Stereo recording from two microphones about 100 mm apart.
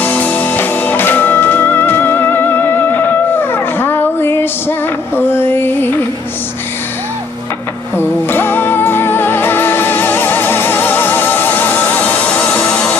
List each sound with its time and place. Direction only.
0.0 s music: 15° left (ahead or behind)
7.9 s music: 20° left (ahead or behind)
12.5 s a sound: 10° left (ahead or behind)